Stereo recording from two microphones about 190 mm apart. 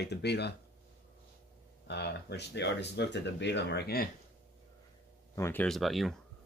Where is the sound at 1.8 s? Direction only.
60° left (ahead or behind).